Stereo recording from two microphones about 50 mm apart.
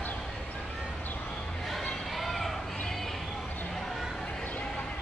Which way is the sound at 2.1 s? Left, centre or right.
Centre.